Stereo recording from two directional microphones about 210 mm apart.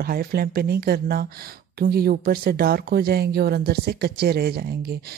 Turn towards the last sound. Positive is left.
turn(degrees=-45)  # may be behind; listen again after turning